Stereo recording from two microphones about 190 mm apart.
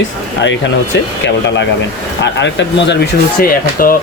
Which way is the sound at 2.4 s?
65° left (ahead or behind).